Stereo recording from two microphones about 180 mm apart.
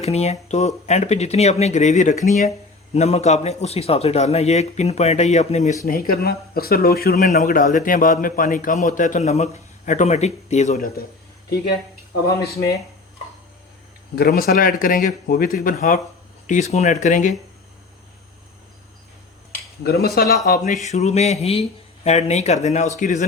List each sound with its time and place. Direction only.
0.0 s a man's voice: 35° left (ahead or behind)
5.8 s speech: 55° left (ahead or behind)
11.4 s speech: 65° left (ahead or behind)
14.2 s speech: 60° left (ahead or behind)
19.5 s speech: 60° left (ahead or behind)
20.8 s a man's voice: 40° left (ahead or behind)